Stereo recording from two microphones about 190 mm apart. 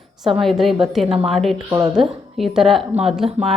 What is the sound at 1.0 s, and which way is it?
Speech, 30° right (ahead or behind).